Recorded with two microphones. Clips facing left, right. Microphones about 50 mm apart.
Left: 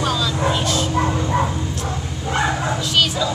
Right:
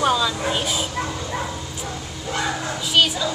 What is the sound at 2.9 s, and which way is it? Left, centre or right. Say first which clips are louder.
Speech: right 1 dB; centre.